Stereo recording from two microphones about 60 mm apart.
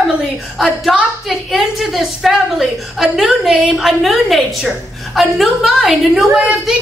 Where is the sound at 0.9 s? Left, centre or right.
Centre.